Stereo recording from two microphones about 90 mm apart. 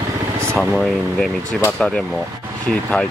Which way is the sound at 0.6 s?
5° left (ahead or behind).